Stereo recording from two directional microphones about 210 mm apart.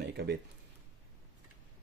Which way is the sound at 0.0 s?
55° right (ahead or behind).